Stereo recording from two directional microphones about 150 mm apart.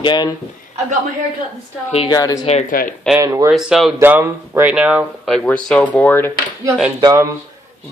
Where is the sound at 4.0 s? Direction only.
15° right (ahead or behind); by 6.3 s 15° left (ahead or behind).